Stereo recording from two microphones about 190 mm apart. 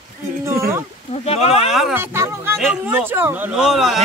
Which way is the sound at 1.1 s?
30° left (ahead or behind).